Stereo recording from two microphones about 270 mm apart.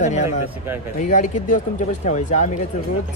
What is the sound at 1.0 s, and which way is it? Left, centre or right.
Speech, left.